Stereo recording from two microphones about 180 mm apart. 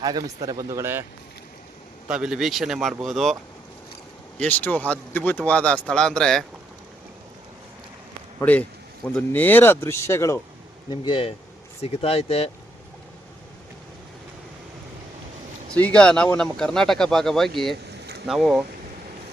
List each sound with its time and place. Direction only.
0.0 s speech: 20° right (ahead or behind)
2.0 s speech: 5° right (ahead or behind)
4.4 s speech: 10° left (ahead or behind)
8.4 s speech: 10° left (ahead or behind)
10.8 s speech: 25° left (ahead or behind)
15.7 s speech: 5° left (ahead or behind)